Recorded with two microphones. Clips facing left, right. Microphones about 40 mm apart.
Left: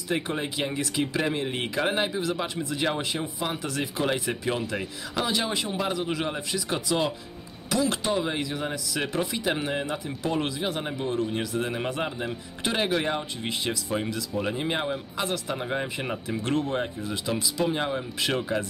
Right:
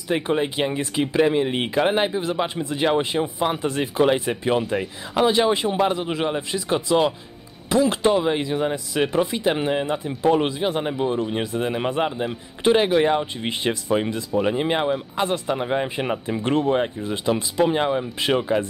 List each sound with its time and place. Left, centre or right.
0.1 s speech: right
9.8 s speech: right